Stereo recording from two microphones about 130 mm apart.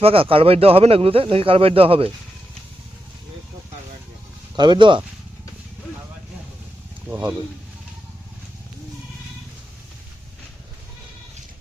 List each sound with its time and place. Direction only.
0.0 s speech: 45° right (ahead or behind)
4.5 s speech: 35° right (ahead or behind)